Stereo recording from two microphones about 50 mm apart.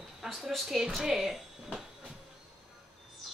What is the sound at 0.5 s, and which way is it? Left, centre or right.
Speech, centre.